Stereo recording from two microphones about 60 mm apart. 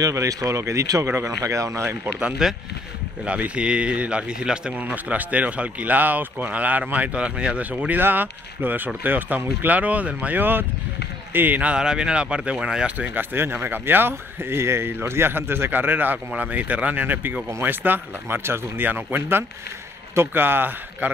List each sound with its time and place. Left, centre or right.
0.0 s speech: right
1.0 s speech: right
1.4 s speech: right
1.7 s speech: right
2.1 s speech: centre
3.3 s speech: right
11.7 s speech: centre
12.9 s speech: right